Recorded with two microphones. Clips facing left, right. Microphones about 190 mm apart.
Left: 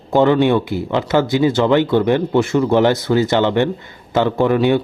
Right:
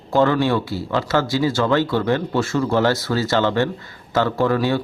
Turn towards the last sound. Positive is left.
turn(degrees=20)  # may be behind; listen again after turning